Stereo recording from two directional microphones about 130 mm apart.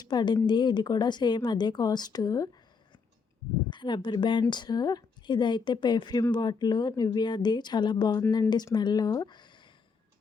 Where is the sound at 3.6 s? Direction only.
35° left (ahead or behind).